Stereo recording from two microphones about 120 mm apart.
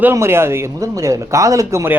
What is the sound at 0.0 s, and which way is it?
A man's voice, 20° right (ahead or behind).